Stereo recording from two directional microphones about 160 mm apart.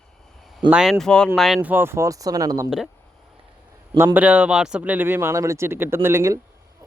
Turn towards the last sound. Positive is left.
turn(degrees=-15)  # may be behind; listen again after turning